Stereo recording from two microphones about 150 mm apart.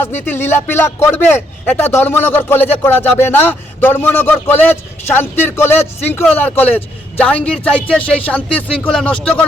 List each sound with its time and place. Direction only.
0.7 s a man's voice: 15° left (ahead or behind)